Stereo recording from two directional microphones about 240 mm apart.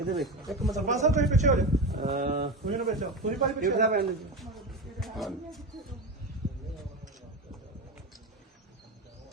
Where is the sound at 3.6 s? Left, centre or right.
Right.